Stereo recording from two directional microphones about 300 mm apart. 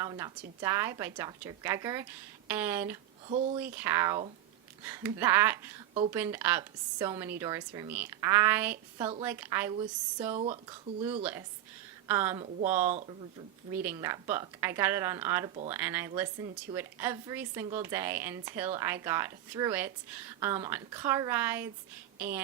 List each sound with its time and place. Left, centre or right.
0.0 s a woman's voice: centre
3.2 s a woman's voice: centre
3.6 s a woman's voice: centre; by 10.6 s right
11.2 s a woman's voice: centre
12.9 s speech: right
13.7 s a woman's voice: centre